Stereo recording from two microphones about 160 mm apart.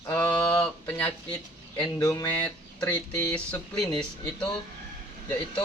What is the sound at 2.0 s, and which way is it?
Speech, 20° left (ahead or behind).